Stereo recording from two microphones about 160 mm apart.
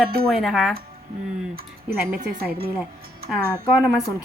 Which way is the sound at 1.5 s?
70° right (ahead or behind).